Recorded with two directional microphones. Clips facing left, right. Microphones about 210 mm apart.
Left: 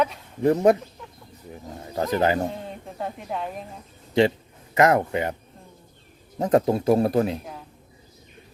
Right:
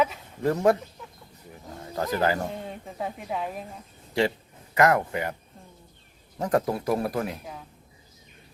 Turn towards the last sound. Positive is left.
turn(degrees=25)  # may be behind; listen again after turning